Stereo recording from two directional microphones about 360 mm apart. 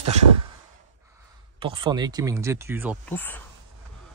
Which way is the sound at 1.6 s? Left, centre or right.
Centre.